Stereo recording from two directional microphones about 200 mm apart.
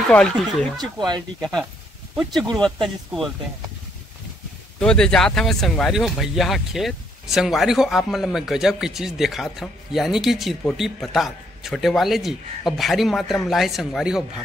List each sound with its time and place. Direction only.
0.1 s speech: 5° left (ahead or behind)
0.7 s speech: 20° right (ahead or behind)
1.4 s speech: centre (ahead or behind)
4.7 s speech: 5° left (ahead or behind)